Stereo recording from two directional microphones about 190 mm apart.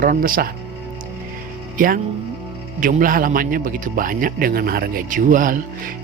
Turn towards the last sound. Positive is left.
turn(degrees=-45)  # may be behind; listen again after turning